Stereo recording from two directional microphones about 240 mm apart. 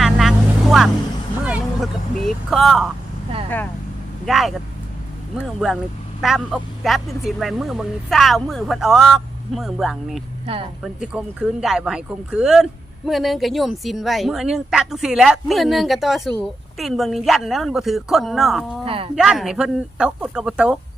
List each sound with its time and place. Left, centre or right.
0.0 s vehicle: centre
1.5 s speech: centre
4.3 s speech: centre
5.5 s speech: centre
10.4 s speech: right
10.8 s speech: centre
18.9 s speech: right
19.1 s speech: centre